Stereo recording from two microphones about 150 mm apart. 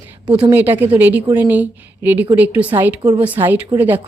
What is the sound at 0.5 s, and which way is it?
A woman's voice, 15° right (ahead or behind).